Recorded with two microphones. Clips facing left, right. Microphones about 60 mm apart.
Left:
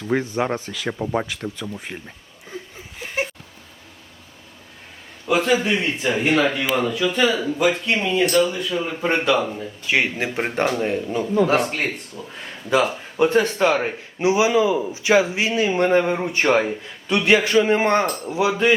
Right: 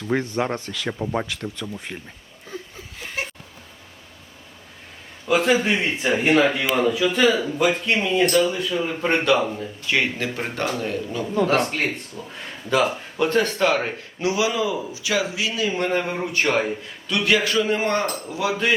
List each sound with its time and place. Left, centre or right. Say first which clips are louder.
0.1 s speech: left 1 dB; centre
5.2 s a man's voice: even; centre
9.8 s speech: left 2 dB; centre
11.3 s speech: left 1 dB; centre
14.2 s speech: left 5 dB; left